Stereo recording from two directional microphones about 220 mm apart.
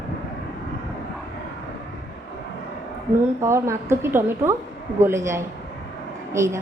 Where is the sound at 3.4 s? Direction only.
10° right (ahead or behind).